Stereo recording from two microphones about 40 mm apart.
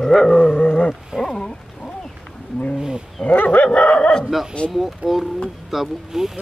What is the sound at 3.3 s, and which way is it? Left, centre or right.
Dog, left.